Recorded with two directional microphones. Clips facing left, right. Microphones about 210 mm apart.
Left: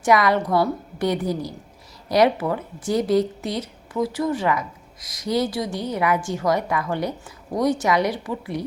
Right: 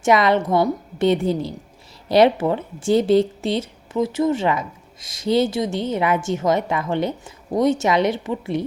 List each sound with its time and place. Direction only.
0.0 s speech: 25° right (ahead or behind)